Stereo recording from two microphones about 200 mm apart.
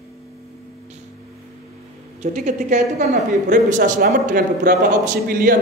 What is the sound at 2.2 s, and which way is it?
A woman's voice, 35° right (ahead or behind).